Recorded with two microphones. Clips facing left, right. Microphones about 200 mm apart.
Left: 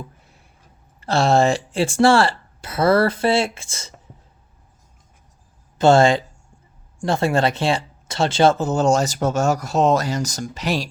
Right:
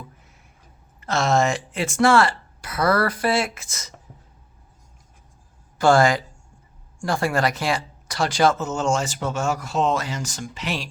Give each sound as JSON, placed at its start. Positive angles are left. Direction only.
{"t": 1.0, "sound": "speech", "side_deg": 30}
{"t": 5.7, "sound": "speech", "side_deg": 25}